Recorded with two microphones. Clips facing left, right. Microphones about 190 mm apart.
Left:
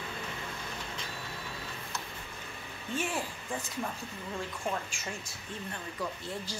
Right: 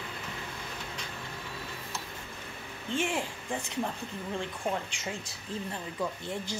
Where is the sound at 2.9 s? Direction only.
20° right (ahead or behind).